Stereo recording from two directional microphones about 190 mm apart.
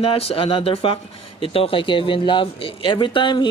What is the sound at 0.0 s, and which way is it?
Speech, 30° left (ahead or behind).